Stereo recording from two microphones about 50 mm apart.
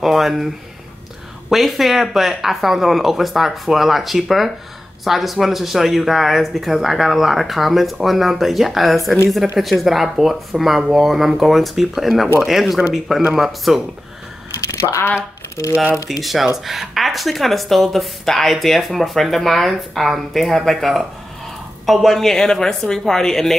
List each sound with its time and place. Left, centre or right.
0.0 s speech: centre
1.5 s speech: centre
14.7 s speech: left
16.1 s a woman's voice: centre